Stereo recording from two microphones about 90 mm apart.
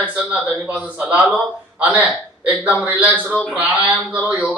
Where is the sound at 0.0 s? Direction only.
15° right (ahead or behind).